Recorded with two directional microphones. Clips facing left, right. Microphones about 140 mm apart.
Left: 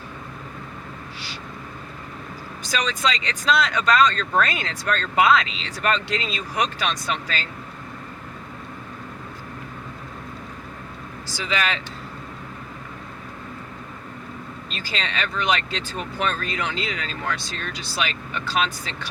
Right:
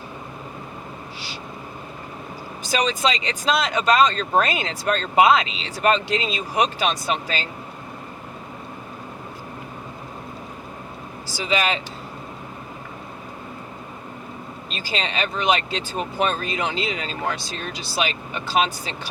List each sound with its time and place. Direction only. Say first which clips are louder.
2.7 s speech: right 3 dB; 25° right (ahead or behind)
11.4 s speech: right 3 dB; 25° right (ahead or behind)
14.7 s speech: right 3 dB; 20° right (ahead or behind)